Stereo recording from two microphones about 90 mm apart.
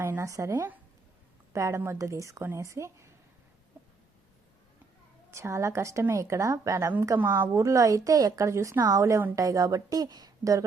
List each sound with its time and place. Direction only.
0.0 s a woman's voice: 30° right (ahead or behind)
3.8 s a sound: 25° right (ahead or behind)
5.3 s a woman's voice: 30° right (ahead or behind)